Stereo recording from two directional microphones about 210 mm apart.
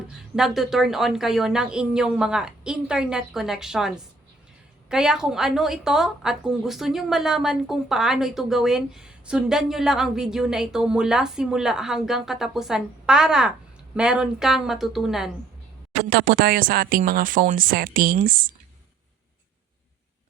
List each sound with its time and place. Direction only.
0.3 s a woman's voice: centre (ahead or behind)
16.0 s speech: 50° right (ahead or behind)